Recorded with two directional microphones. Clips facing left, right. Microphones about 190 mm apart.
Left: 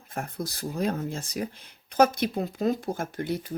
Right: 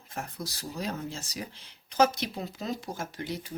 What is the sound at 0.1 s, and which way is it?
Speech, 55° left (ahead or behind).